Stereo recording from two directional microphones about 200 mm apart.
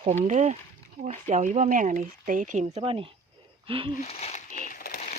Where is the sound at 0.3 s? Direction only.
35° right (ahead or behind).